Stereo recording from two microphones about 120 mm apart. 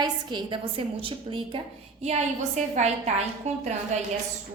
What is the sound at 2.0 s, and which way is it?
A woman's voice, 70° right (ahead or behind).